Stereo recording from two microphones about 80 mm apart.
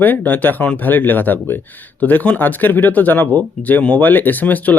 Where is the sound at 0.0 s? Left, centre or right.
Left.